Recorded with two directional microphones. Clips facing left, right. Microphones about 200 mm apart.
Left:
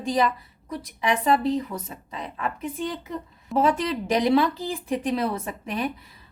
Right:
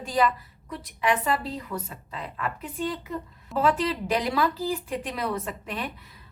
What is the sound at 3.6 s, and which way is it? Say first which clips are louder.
A woman's voice: left 2 dB; 20° left (ahead or behind).